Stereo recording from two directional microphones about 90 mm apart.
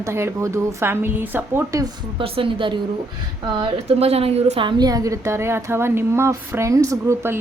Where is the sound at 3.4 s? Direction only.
65° right (ahead or behind); by 4.7 s 90° right.